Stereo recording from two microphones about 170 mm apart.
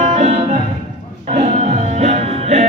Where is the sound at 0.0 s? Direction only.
45° right (ahead or behind).